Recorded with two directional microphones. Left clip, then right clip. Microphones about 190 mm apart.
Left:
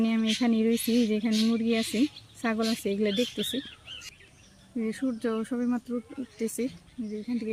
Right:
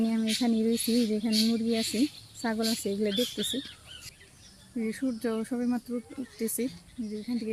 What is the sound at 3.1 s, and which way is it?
Speech, 25° left (ahead or behind).